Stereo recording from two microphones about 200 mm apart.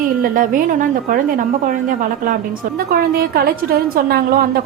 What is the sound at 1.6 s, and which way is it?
A woman's voice, 40° right (ahead or behind).